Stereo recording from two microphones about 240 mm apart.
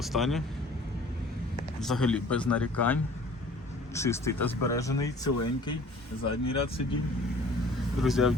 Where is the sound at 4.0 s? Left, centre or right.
Centre.